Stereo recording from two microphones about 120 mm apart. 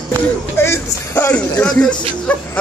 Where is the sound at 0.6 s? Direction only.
15° left (ahead or behind).